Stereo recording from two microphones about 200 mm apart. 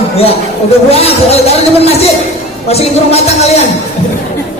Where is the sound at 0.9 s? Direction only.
30° left (ahead or behind).